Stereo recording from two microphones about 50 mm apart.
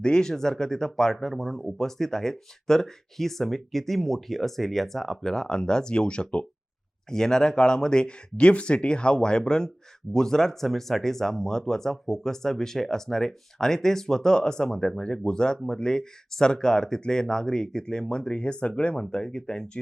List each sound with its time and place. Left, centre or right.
0.0 s speech: centre